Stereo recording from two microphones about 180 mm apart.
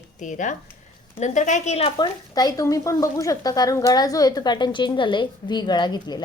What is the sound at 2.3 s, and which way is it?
A woman's voice, 20° left (ahead or behind).